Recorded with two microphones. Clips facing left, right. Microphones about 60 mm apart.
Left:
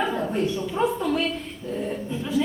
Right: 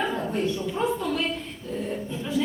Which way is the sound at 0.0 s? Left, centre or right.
Centre.